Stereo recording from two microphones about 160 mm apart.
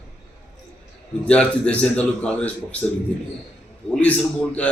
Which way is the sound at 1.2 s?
5° left (ahead or behind).